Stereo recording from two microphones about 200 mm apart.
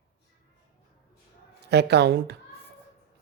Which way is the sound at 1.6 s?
55° right (ahead or behind).